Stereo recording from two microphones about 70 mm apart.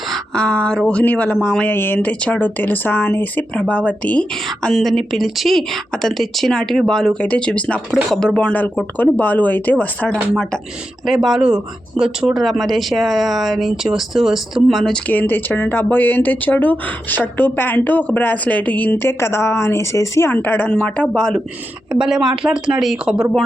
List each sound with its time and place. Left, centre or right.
0.1 s speech: centre
1.6 s speech: left
4.4 s speech: centre; by 10.1 s left
10.1 s speech: centre
11.0 s speech: centre
15.0 s speech: left
20.3 s speech: left
20.7 s speech: centre
21.9 s speech: centre